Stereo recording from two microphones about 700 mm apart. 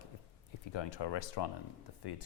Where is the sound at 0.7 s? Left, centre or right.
Left.